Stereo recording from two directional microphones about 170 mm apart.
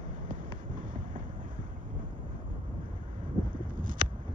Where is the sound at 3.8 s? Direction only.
55° right (ahead or behind).